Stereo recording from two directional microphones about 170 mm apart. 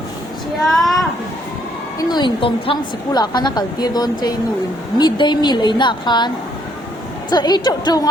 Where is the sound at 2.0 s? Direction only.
25° left (ahead or behind).